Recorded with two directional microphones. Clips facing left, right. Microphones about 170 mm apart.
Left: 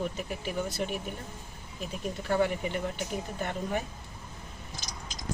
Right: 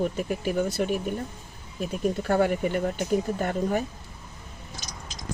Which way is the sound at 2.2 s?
50° right (ahead or behind).